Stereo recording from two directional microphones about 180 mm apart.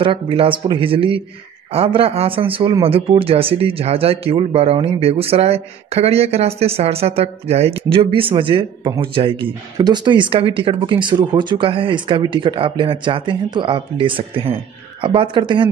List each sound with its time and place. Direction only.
0.0 s speech: 30° right (ahead or behind)